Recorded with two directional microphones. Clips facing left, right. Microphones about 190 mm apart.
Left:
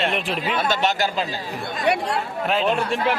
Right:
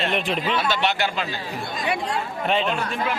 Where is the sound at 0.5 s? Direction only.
45° left (ahead or behind).